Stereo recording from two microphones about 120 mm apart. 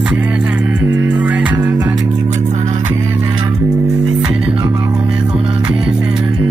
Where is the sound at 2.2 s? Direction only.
80° right.